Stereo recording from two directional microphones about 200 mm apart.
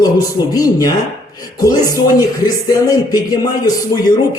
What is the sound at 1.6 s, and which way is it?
Music, 15° left (ahead or behind).